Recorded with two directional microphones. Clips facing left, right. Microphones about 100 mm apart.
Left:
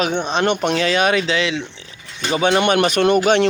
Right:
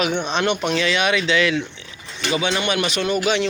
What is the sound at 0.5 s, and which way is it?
Speech, 50° left (ahead or behind).